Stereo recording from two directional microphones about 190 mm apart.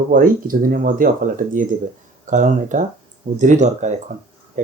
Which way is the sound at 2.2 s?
40° right (ahead or behind).